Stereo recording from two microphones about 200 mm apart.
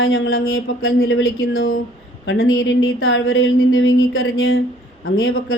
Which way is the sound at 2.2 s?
80° left.